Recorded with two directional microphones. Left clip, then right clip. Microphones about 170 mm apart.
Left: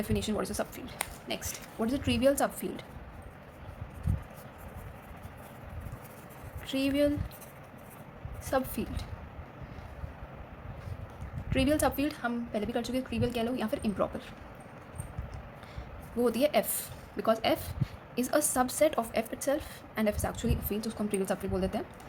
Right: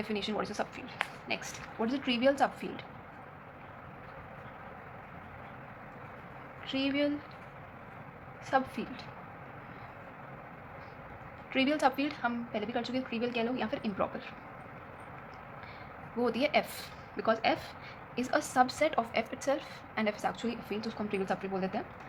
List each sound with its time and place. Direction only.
0.0 s a woman's voice: 90° left
6.7 s a woman's voice: 90° left
8.5 s a woman's voice: 90° left
11.5 s a woman's voice: 90° left
16.2 s a woman's voice: 90° left